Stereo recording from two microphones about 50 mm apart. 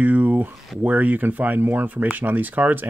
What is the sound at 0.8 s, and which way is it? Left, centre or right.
Speech, right.